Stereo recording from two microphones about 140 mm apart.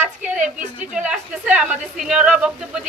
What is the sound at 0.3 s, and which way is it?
Speech, 60° right (ahead or behind).